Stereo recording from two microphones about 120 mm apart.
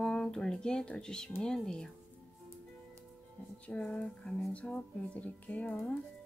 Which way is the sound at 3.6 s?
10° left (ahead or behind).